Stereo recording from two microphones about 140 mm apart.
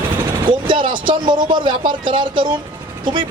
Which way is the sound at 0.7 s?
35° right (ahead or behind).